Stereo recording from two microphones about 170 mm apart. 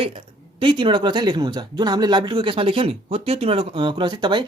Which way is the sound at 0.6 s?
30° right (ahead or behind).